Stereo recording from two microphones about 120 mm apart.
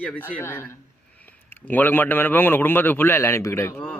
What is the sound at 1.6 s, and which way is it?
A man's voice, 15° left (ahead or behind).